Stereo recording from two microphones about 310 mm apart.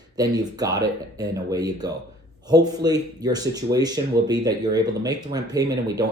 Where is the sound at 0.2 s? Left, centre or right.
Centre.